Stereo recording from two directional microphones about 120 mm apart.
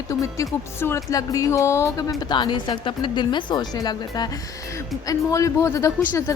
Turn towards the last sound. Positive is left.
turn(degrees=25)  # may be behind; listen again after turning